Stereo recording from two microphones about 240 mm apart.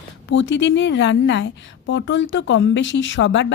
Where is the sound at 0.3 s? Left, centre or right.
Left.